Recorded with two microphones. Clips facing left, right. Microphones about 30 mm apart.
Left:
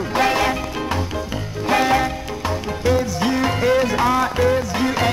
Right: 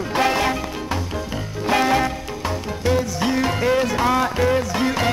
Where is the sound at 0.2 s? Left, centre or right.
Centre.